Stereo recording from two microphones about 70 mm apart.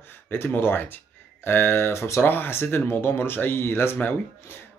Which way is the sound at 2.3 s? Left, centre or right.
Left.